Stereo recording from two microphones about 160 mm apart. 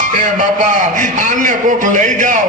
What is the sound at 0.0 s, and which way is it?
A man's voice, 55° right (ahead or behind).